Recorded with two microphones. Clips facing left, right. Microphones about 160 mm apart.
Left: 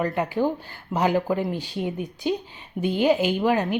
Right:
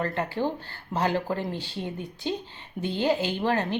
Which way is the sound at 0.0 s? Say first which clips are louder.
Left 4 dB; 15° left (ahead or behind).